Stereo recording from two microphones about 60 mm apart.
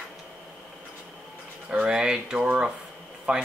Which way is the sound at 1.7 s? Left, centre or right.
Centre.